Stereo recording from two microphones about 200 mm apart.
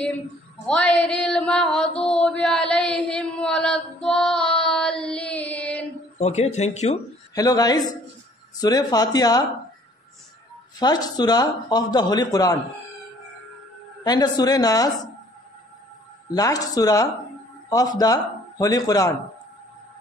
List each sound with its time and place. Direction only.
0.7 s a sound: 5° left (ahead or behind)
2.2 s chant: 5° left (ahead or behind)
6.1 s speech: 35° left (ahead or behind)
7.3 s speech: 20° left (ahead or behind)
10.8 s speech: 20° left (ahead or behind)
14.0 s speech: 20° left (ahead or behind)
16.3 s a man's voice: 20° left (ahead or behind)